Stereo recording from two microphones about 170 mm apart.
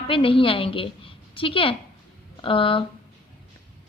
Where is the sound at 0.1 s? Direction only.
30° left (ahead or behind).